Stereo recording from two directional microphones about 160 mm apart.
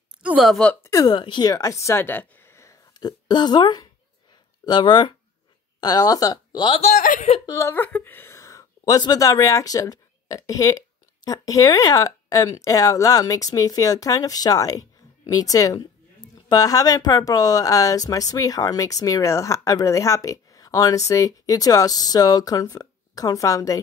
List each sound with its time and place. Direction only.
0.2 s speech: 5° right (ahead or behind)
0.8 s a woman's voice: 25° left (ahead or behind)
6.8 s speech: 50° left (ahead or behind)
7.4 s a woman's voice: 15° left (ahead or behind)